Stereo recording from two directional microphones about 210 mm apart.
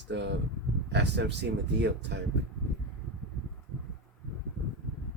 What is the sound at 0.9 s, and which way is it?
Speech, 55° right (ahead or behind).